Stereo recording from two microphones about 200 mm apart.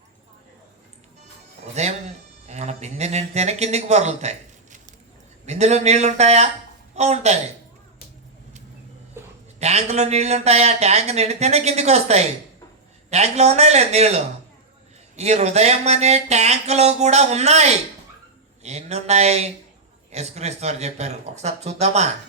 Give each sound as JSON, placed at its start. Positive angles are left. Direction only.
{"t": 1.7, "sound": "speech", "side_deg": -35}
{"t": 9.2, "sound": "a sound", "side_deg": -15}
{"t": 9.6, "sound": "speech", "side_deg": -35}